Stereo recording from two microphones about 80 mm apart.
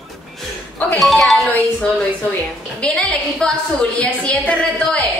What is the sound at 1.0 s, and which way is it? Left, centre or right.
Music, centre.